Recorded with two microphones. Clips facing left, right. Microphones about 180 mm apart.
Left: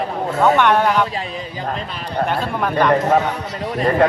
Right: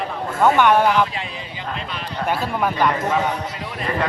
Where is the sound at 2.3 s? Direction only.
5° right (ahead or behind).